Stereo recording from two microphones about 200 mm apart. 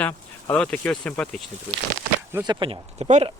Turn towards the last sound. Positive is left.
turn(degrees=-35)  # may be behind; listen again after turning